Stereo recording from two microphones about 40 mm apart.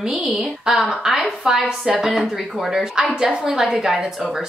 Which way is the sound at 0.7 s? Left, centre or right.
Centre.